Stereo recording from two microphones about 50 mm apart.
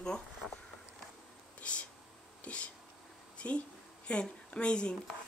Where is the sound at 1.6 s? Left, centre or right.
Left.